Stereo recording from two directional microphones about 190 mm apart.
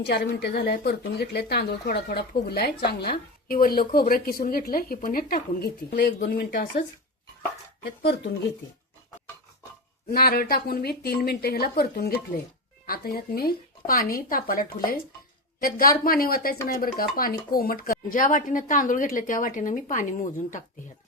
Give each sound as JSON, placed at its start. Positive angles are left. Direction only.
{"t": 0.0, "sound": "speech", "side_deg": 60}
{"t": 7.9, "sound": "speech", "side_deg": 60}
{"t": 10.1, "sound": "speech", "side_deg": 50}